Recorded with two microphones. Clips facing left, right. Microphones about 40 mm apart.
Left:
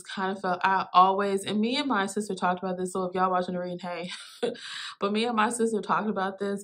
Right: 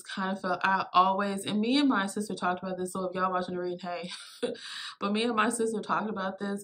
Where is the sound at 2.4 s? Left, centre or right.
Centre.